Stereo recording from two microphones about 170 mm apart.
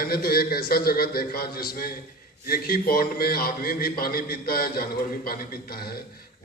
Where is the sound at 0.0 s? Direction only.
60° left (ahead or behind).